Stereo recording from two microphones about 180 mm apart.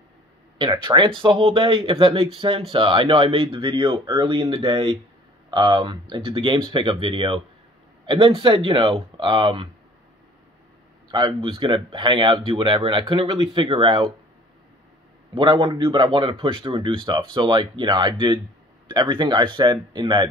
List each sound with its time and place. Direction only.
0.6 s speech: 25° right (ahead or behind)
11.1 s speech: 25° right (ahead or behind)
15.5 s speech: 20° right (ahead or behind)